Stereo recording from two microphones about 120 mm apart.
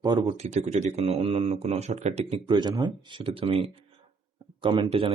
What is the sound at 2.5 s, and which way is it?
Speech, 35° right (ahead or behind).